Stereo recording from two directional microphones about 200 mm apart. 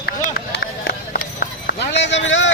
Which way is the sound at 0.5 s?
50° left (ahead or behind).